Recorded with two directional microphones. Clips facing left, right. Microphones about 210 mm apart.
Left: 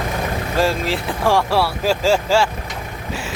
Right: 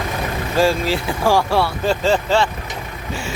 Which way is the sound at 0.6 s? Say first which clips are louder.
Right 3 dB; centre (ahead or behind).